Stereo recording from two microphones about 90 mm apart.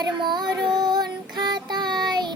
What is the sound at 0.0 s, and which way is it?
Child singing, 55° right (ahead or behind).